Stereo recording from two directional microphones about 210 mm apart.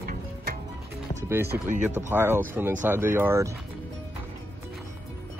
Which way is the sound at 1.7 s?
35° right (ahead or behind).